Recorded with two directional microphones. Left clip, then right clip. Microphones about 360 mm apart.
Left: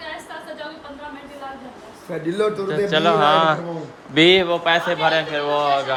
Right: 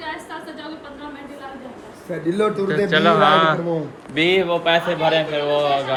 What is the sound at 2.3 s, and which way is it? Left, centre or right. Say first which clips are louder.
Speech: right 2 dB; centre.